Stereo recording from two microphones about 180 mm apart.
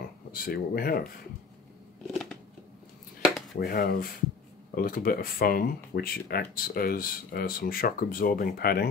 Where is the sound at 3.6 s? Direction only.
55° left (ahead or behind).